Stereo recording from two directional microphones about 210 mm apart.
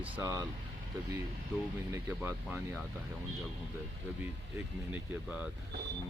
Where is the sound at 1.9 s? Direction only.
10° right (ahead or behind).